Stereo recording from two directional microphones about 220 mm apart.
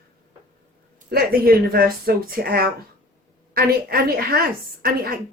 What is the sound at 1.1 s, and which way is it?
A woman's voice, 45° right (ahead or behind).